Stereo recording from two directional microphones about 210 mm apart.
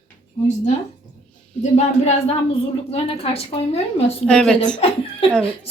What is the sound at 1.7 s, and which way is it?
A woman's voice, 30° left (ahead or behind).